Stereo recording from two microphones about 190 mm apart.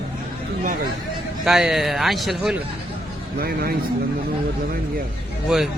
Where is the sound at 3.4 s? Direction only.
55° right (ahead or behind).